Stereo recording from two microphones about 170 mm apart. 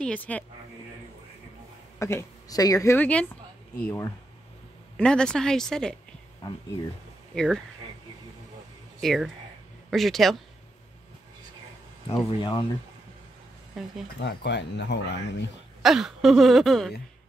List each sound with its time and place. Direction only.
0.0 s speech: 10° left (ahead or behind)
2.0 s speech: 15° left (ahead or behind)
4.9 s speech: 5° left (ahead or behind)
7.3 s speech: 5° left (ahead or behind)
9.0 s speech: centre (ahead or behind)
12.1 s speech: 25° left (ahead or behind)
13.8 s speech: centre (ahead or behind)
14.2 s speech: 90° left
15.8 s speech: centre (ahead or behind)